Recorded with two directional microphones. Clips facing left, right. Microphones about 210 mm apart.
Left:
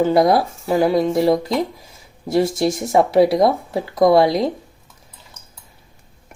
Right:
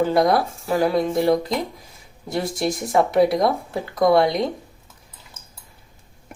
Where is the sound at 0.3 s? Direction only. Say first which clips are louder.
Left 3 dB; 25° left (ahead or behind).